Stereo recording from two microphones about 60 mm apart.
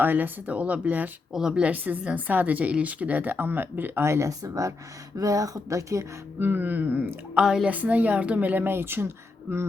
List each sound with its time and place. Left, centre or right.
0.0 s speech: right
1.3 s speech: centre
1.6 s speech: right
4.0 s speech: right
4.3 s speech: right
6.4 s speech: right
7.4 s speech: centre
7.7 s speech: right